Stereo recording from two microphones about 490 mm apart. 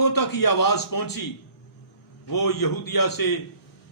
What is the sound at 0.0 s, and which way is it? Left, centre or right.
A man's voice, left.